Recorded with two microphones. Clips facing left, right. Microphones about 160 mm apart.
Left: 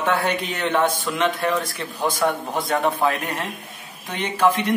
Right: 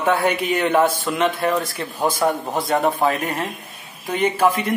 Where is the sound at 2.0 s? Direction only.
20° right (ahead or behind).